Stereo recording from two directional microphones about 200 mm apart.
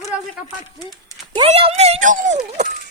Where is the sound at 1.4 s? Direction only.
30° right (ahead or behind).